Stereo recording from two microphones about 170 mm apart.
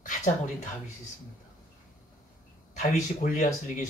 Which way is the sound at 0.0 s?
50° left (ahead or behind).